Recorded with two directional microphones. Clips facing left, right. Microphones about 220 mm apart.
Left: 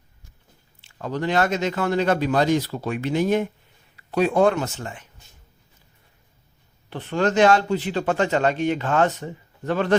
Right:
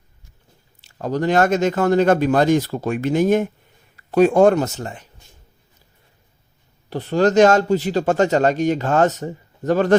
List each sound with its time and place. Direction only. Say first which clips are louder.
0.8 s a man's voice: right 5 dB; 40° right (ahead or behind)
6.9 s speech: right 6 dB; 40° right (ahead or behind)